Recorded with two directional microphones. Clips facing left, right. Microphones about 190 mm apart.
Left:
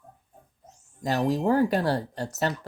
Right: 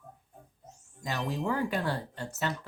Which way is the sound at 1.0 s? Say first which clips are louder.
Left 8 dB; 40° left (ahead or behind).